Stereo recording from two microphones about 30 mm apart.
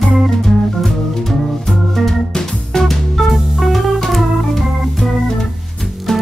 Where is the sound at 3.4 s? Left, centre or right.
Centre.